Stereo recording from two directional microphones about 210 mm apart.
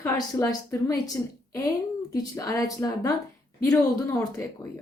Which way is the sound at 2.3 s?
15° left (ahead or behind).